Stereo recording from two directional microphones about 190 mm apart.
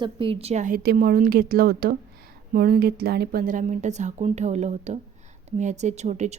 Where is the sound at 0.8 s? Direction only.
55° right (ahead or behind).